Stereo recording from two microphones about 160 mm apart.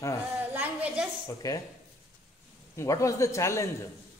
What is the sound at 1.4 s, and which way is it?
Speech, 20° left (ahead or behind).